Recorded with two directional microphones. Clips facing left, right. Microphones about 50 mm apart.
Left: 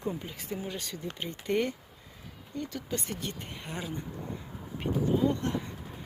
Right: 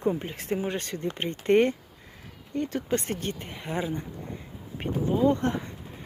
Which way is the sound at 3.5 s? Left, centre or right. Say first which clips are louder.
Right 7 dB; centre.